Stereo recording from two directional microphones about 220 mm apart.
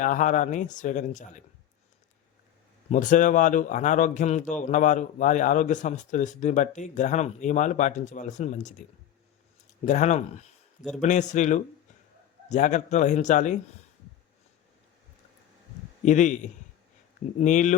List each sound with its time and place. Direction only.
0.0 s a man's voice: 35° left (ahead or behind)
2.9 s a man's voice: 35° left (ahead or behind)
9.8 s a man's voice: 35° left (ahead or behind)
16.0 s a man's voice: 35° left (ahead or behind)
17.4 s a man's voice: 35° left (ahead or behind)